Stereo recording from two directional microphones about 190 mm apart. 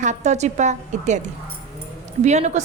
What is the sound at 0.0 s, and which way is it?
A woman's voice, 40° right (ahead or behind).